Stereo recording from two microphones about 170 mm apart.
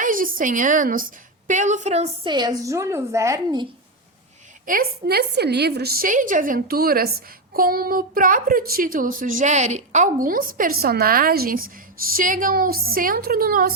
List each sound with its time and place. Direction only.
0.0 s a woman's voice: 50° right (ahead or behind)
2.3 s a woman's voice: 25° right (ahead or behind)
4.6 s a woman's voice: 55° right (ahead or behind)